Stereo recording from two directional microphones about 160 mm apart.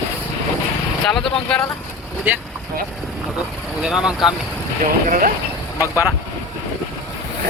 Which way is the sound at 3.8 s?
5° right (ahead or behind).